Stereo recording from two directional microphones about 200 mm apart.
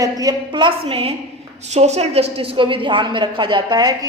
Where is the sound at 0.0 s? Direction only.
20° right (ahead or behind).